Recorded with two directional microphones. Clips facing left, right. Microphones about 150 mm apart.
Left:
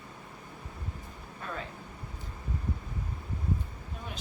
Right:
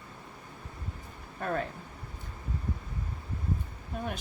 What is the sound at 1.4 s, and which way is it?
Speech, 55° right (ahead or behind).